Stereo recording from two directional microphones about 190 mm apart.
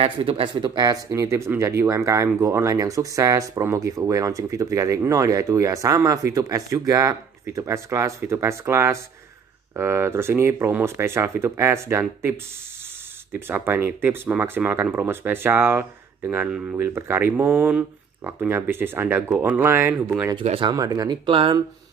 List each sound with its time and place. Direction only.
0.0 s speech: 30° right (ahead or behind); by 20.3 s 10° right (ahead or behind)
20.3 s speech: 30° right (ahead or behind)